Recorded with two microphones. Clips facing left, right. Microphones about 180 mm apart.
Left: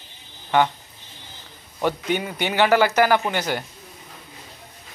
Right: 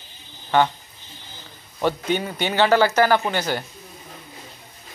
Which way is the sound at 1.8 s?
15° left (ahead or behind).